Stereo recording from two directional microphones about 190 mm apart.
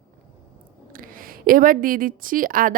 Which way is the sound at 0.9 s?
50° right (ahead or behind).